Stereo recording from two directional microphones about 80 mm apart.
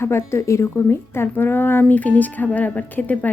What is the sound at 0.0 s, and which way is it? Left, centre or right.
Speech, left.